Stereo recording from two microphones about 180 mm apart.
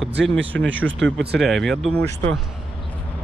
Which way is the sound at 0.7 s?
90° right.